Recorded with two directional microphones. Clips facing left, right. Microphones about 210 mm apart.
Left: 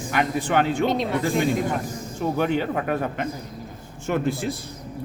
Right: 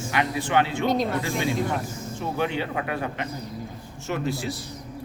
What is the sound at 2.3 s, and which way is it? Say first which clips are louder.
A man's voice: left 3 dB; 45° left (ahead or behind).